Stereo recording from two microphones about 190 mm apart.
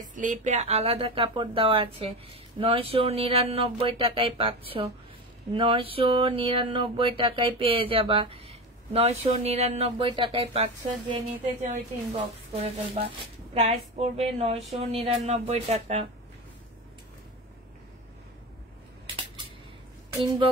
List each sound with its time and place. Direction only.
0.1 s speech: 40° right (ahead or behind)